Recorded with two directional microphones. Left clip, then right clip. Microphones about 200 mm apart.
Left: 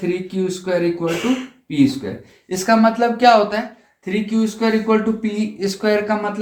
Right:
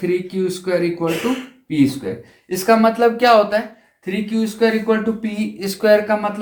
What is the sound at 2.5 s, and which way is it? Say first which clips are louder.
Speech: right 1 dB; 25° right (ahead or behind).